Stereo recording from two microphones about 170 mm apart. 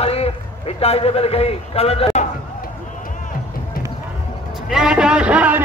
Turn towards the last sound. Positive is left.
turn(degrees=-10)  # may be behind; listen again after turning